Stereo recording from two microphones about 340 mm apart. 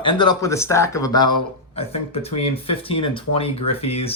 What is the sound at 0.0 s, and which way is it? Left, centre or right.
Speech, centre.